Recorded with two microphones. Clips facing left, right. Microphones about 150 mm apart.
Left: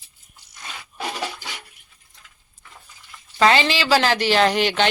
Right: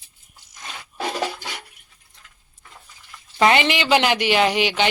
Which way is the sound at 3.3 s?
20° right (ahead or behind).